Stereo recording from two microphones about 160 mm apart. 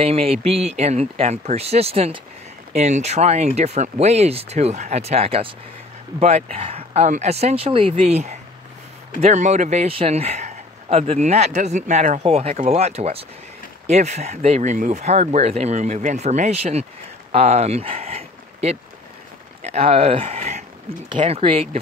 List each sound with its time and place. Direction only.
0.0 s a man's voice: 40° right (ahead or behind)
21.1 s speech: 30° right (ahead or behind)